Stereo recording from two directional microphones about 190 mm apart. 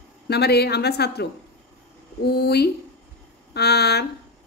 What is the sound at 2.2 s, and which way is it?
A woman's voice, 60° left (ahead or behind).